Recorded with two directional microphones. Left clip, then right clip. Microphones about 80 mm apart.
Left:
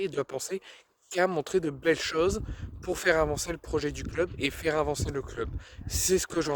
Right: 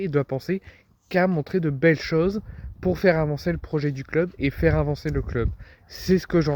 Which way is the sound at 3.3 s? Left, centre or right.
Left.